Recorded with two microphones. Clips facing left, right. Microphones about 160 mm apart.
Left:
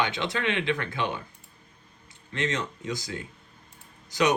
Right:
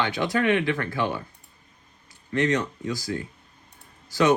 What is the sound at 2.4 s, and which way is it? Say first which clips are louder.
Speech: right 6 dB; 20° left (ahead or behind).